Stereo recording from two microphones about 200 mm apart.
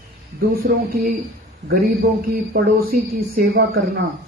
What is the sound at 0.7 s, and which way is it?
Speech, 50° right (ahead or behind).